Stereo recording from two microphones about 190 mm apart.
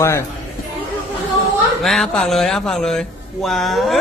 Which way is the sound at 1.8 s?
Centre (ahead or behind).